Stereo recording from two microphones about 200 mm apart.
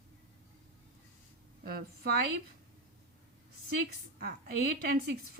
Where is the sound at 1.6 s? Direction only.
50° right (ahead or behind).